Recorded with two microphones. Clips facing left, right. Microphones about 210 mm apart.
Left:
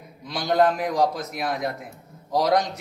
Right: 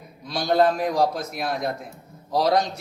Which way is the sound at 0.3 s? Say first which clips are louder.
Right 1 dB; 15° left (ahead or behind).